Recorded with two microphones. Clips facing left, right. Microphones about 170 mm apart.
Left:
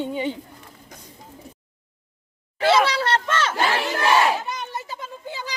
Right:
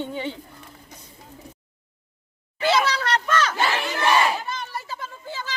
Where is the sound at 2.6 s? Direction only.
30° left (ahead or behind).